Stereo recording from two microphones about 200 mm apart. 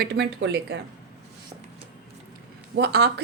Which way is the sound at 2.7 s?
55° right (ahead or behind).